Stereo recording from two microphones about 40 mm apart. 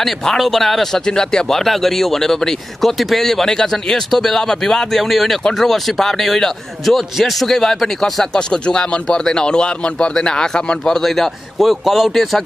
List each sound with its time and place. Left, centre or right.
0.0 s a man's voice: centre
1.6 s a man's voice: centre
4.9 s a man's voice: centre
8.4 s a man's voice: left; by 12.4 s centre